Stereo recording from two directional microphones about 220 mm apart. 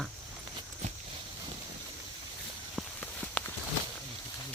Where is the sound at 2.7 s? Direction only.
5° left (ahead or behind).